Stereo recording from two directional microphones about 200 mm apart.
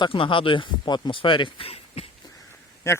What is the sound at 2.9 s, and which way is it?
Speech, 15° left (ahead or behind).